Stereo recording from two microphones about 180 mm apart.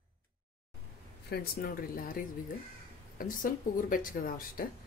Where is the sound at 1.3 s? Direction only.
55° left (ahead or behind).